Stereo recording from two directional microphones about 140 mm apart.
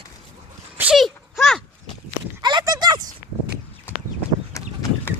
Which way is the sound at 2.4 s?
30° right (ahead or behind).